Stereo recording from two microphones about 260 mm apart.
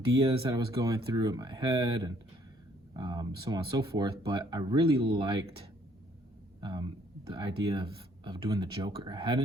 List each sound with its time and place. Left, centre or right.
0.4 s speech: centre